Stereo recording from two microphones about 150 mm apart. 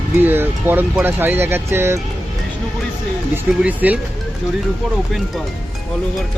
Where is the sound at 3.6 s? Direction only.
10° right (ahead or behind).